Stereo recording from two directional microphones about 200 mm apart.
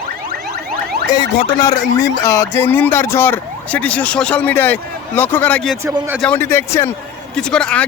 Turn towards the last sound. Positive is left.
turn(degrees=5)  # may be behind; listen again after turning